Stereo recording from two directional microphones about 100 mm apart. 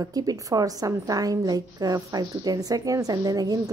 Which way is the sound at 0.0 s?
40° right (ahead or behind).